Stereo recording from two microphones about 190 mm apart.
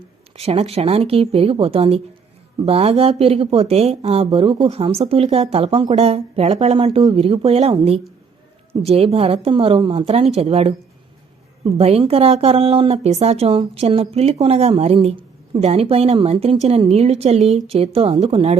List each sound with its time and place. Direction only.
0.3 s speech: 30° right (ahead or behind)